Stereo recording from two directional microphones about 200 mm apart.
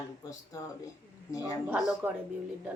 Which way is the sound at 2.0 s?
10° right (ahead or behind).